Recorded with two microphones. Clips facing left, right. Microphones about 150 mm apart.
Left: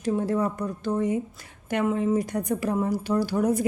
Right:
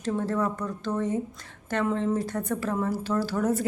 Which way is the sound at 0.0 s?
10° left (ahead or behind).